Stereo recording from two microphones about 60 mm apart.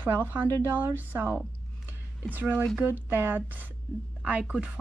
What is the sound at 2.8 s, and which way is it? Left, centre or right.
Speech, right.